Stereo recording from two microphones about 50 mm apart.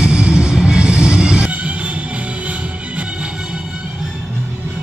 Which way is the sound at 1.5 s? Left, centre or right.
Right.